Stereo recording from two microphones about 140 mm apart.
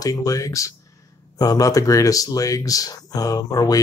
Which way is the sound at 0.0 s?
25° left (ahead or behind).